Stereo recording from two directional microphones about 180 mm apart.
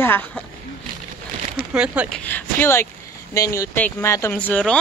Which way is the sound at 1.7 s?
5° right (ahead or behind).